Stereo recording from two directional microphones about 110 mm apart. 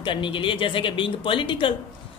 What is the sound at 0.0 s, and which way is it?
A woman's voice, 50° left (ahead or behind).